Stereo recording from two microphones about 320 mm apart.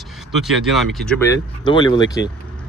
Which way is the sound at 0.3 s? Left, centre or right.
Centre.